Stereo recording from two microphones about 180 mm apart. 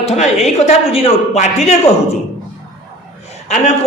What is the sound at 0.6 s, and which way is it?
Speech, 35° left (ahead or behind).